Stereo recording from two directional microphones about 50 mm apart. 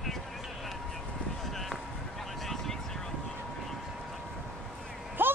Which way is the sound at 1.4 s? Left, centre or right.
Centre.